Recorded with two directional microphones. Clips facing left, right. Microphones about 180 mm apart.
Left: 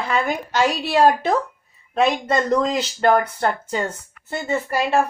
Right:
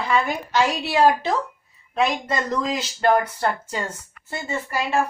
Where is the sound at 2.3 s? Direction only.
50° left (ahead or behind).